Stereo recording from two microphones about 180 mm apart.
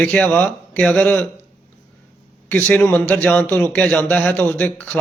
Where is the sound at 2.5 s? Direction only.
5° left (ahead or behind).